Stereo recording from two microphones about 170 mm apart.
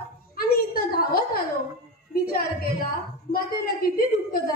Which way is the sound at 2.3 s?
60° left (ahead or behind).